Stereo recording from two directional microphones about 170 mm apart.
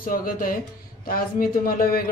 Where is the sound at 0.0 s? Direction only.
55° left (ahead or behind).